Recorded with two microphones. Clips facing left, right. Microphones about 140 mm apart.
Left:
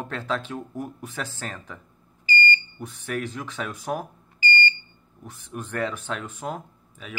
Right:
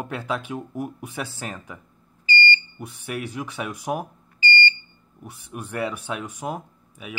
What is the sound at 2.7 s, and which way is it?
Speech, 10° right (ahead or behind).